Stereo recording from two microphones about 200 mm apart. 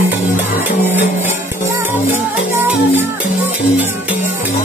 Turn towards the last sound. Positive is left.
turn(degrees=-10)  # may be behind; listen again after turning